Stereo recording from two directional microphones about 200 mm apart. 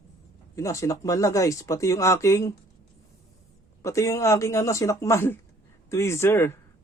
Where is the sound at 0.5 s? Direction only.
15° left (ahead or behind).